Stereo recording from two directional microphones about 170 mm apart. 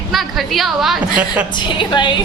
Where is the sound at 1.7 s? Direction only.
25° left (ahead or behind).